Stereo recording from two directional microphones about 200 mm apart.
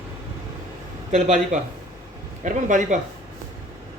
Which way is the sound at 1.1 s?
35° right (ahead or behind).